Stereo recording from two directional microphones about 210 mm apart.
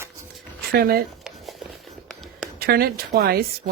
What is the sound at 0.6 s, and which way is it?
Speech, 45° right (ahead or behind).